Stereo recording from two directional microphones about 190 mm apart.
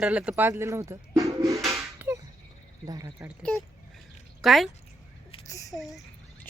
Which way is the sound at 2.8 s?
20° right (ahead or behind).